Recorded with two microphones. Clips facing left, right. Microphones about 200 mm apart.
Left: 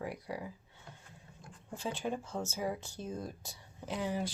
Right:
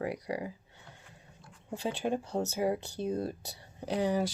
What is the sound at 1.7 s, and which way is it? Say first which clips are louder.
Speech: right 5 dB; 70° right (ahead or behind).